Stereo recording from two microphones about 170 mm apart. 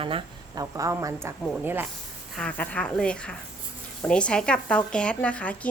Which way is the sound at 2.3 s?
5° left (ahead or behind).